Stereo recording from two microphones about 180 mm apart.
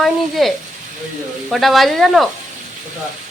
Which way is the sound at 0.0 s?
Centre (ahead or behind).